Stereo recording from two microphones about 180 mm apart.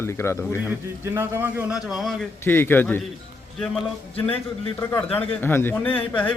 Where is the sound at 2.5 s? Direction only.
10° left (ahead or behind).